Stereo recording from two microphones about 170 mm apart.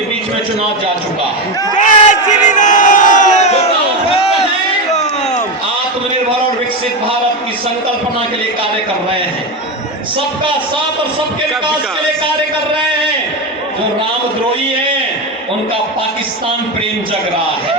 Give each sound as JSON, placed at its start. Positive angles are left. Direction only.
{"t": 1.7, "sound": "crowd", "side_deg": 45}